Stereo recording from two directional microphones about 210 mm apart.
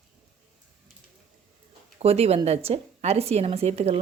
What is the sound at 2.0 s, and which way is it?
A woman's voice, 30° right (ahead or behind).